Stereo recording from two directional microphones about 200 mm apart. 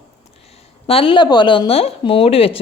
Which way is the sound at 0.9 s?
25° left (ahead or behind).